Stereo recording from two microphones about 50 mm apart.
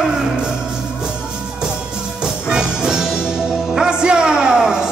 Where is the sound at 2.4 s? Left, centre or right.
Centre.